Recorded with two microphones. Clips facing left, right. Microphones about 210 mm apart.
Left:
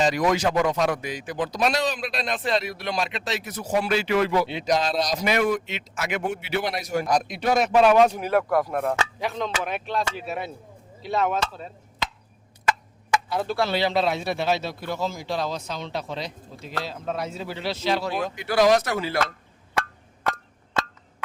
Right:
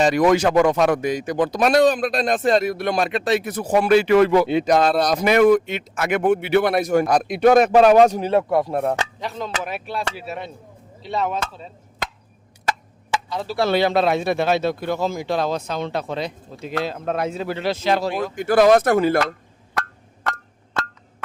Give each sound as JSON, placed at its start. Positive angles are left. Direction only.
{"t": 0.0, "sound": "speech", "side_deg": -55}
{"t": 8.3, "sound": "speech", "side_deg": -25}
{"t": 9.2, "sound": "speech", "side_deg": -5}
{"t": 13.3, "sound": "speech", "side_deg": 0}
{"t": 13.7, "sound": "speech", "side_deg": -50}